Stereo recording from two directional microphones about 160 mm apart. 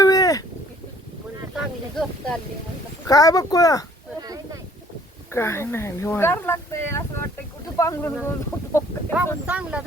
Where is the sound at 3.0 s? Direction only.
25° left (ahead or behind).